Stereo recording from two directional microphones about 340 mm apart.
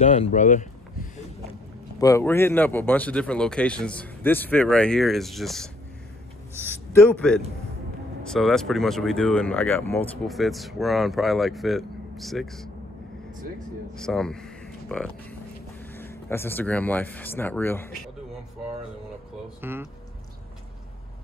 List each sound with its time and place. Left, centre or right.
0.0 s a sound: centre
2.0 s speech: centre
6.9 s speech: centre
13.9 s speech: centre
19.6 s speech: centre